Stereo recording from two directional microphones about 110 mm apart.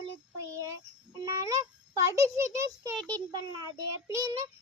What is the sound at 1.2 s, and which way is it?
A child's voice, 30° right (ahead or behind).